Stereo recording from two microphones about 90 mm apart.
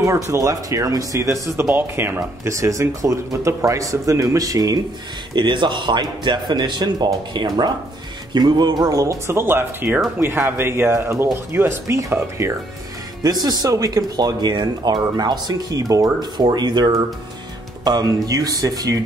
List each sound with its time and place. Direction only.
0.0 s speech: 35° right (ahead or behind)
1.7 s speech: 25° right (ahead or behind)
2.4 s speech: 35° right (ahead or behind)
5.3 s speech: 60° right (ahead or behind); by 12.5 s 30° right (ahead or behind)
13.2 s speech: 45° right (ahead or behind)